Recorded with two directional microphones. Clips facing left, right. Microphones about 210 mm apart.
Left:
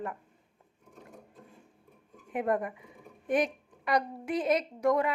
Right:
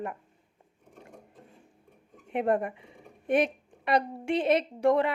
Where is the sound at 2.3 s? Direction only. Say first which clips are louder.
Right 3 dB; 30° right (ahead or behind).